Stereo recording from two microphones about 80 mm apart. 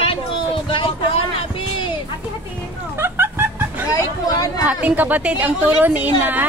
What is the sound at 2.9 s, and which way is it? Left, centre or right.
Music, right.